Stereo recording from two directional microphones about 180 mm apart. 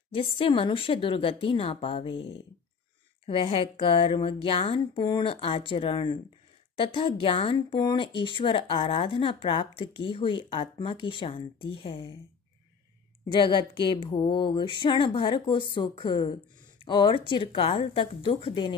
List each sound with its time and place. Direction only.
0.1 s speech: 30° left (ahead or behind)
13.3 s speech: 25° left (ahead or behind)